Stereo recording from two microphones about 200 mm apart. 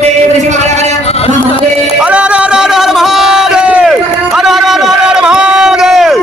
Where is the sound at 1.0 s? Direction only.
30° left (ahead or behind).